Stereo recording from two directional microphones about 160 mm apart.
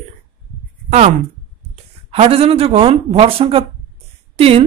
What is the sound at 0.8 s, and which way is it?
Speech, 45° right (ahead or behind).